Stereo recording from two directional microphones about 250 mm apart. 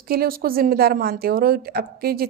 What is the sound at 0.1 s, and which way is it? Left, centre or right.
A woman's voice, right.